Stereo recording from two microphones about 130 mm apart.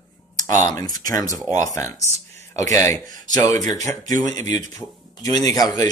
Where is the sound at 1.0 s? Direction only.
25° left (ahead or behind).